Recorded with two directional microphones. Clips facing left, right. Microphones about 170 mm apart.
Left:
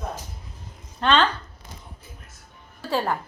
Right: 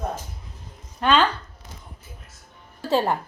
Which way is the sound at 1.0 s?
10° right (ahead or behind).